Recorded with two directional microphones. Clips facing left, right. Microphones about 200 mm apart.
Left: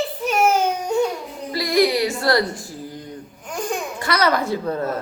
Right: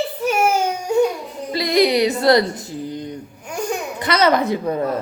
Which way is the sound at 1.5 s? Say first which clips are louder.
Right 2 dB; 20° right (ahead or behind).